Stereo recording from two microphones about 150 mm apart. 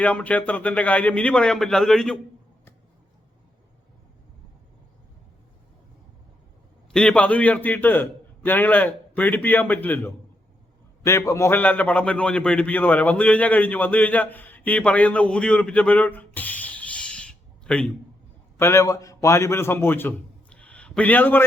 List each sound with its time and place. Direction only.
0.0 s a man's voice: 10° left (ahead or behind)
6.9 s a man's voice: 5° left (ahead or behind)
11.3 s a man's voice: 20° left (ahead or behind)
18.5 s a man's voice: 20° left (ahead or behind)